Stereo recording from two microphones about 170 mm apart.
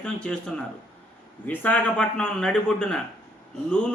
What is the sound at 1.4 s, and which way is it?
A man's voice, 10° left (ahead or behind).